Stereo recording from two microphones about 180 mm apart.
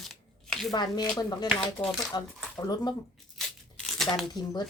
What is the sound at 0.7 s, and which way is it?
Speech, 25° left (ahead or behind).